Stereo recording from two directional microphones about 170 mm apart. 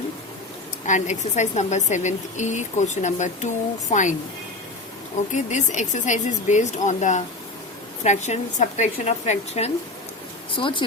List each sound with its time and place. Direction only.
0.9 s a woman's voice: 45° left (ahead or behind)
5.3 s a woman's voice: 45° left (ahead or behind)
10.5 s speech: 30° left (ahead or behind)